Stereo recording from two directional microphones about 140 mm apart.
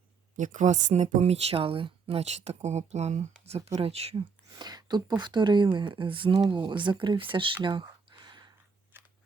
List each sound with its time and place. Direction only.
0.3 s speech: 65° right (ahead or behind); by 4.2 s 45° right (ahead or behind)
4.5 s speech: 30° right (ahead or behind)
7.6 s a sound: 35° right (ahead or behind)